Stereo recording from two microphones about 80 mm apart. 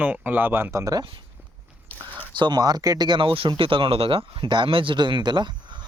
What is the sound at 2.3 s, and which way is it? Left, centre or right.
Speech, right.